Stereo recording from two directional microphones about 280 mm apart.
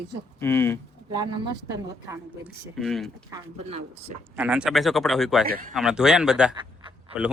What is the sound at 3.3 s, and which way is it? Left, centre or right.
Speech, centre.